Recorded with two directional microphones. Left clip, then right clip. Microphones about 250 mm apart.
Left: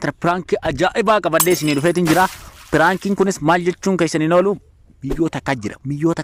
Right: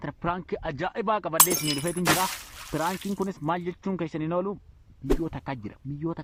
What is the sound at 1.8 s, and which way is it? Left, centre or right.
Speech, left.